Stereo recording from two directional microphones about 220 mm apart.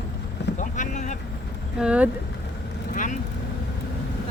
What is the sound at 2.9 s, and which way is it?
Speech, 35° left (ahead or behind).